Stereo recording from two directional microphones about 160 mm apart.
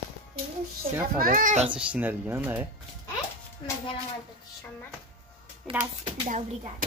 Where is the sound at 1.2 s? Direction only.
60° right (ahead or behind).